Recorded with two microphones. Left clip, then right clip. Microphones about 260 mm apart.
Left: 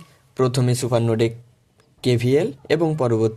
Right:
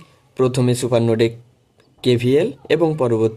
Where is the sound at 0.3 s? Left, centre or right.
Left.